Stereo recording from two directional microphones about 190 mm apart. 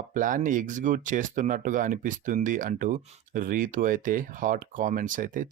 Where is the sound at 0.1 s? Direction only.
45° right (ahead or behind).